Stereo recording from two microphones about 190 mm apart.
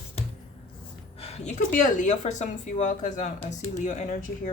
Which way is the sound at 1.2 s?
35° left (ahead or behind).